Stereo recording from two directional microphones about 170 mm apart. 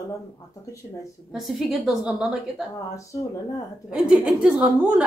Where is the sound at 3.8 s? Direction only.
5° right (ahead or behind).